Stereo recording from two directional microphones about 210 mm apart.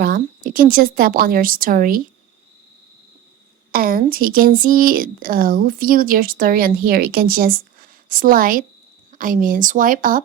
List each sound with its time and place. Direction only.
0.0 s a woman's voice: 45° right (ahead or behind)
3.7 s speech: 45° right (ahead or behind)